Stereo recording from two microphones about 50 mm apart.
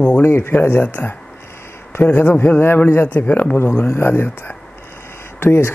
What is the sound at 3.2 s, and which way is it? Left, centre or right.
Speech, left.